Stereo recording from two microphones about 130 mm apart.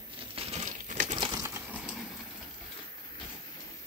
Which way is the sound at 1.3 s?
20° right (ahead or behind).